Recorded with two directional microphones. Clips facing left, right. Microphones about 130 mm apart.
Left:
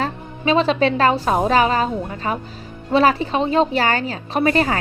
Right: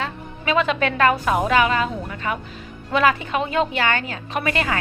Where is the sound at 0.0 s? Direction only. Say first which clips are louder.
Left 5 dB; 30° left (ahead or behind).